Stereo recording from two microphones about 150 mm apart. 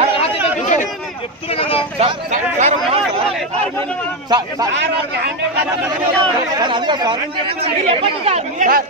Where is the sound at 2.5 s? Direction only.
45° right (ahead or behind).